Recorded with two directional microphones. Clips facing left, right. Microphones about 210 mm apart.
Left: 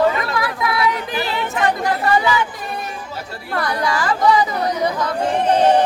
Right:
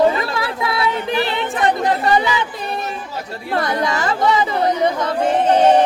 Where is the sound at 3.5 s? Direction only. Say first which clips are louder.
Right 2 dB; 20° right (ahead or behind).